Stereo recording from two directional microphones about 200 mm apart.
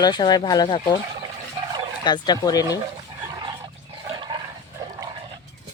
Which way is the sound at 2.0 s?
20° left (ahead or behind).